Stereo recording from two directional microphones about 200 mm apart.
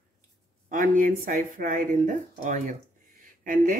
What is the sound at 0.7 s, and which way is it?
Speech, 40° right (ahead or behind).